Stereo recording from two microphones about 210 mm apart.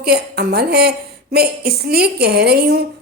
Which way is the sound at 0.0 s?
50° right (ahead or behind).